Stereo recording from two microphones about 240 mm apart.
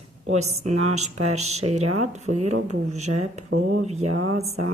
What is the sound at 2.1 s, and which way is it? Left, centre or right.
A woman's voice, right.